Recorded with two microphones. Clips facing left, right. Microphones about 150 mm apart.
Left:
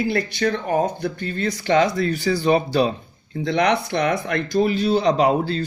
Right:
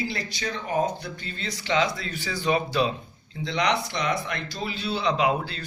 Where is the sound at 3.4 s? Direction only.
55° left (ahead or behind).